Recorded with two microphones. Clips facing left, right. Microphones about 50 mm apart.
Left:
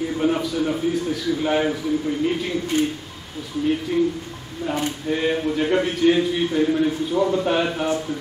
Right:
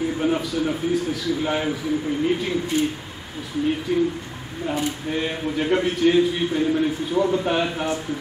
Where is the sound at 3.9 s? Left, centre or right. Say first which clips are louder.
Even; centre.